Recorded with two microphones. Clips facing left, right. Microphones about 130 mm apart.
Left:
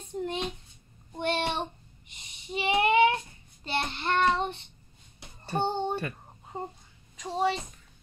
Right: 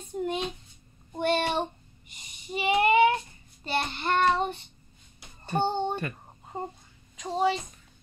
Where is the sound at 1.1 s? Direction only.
5° right (ahead or behind).